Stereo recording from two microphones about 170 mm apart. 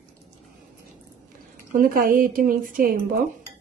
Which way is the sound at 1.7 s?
55° right (ahead or behind).